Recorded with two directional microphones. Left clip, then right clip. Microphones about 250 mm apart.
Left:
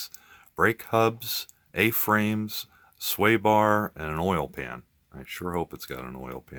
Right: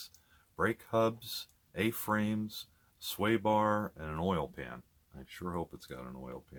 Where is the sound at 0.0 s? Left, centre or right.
Left.